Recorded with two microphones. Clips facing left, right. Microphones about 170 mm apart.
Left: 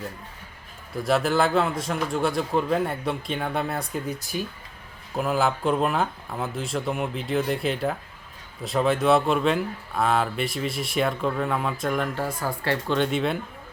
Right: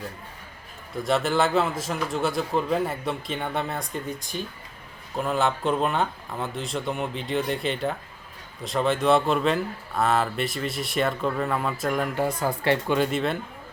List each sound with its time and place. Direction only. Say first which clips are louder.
0.9 s a man's voice: left 1 dB; centre (ahead or behind)
12.1 s speech: right 3 dB; 20° right (ahead or behind)
12.9 s a man's voice: even; centre (ahead or behind)